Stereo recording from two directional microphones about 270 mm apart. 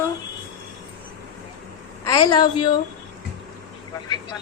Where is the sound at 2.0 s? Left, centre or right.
Centre.